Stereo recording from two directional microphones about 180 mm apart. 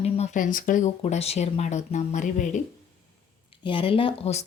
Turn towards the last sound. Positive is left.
turn(degrees=35)  # may be behind; listen again after turning